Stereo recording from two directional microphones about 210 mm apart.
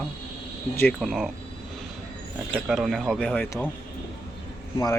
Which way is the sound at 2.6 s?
Centre (ahead or behind).